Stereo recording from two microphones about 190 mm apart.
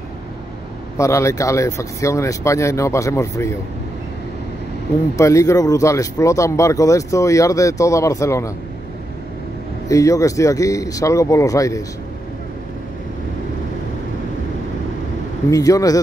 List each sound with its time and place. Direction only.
0.9 s speech: 15° left (ahead or behind)
5.1 s speech: 15° left (ahead or behind)
9.8 s speech: 15° left (ahead or behind)
15.5 s speech: 20° left (ahead or behind)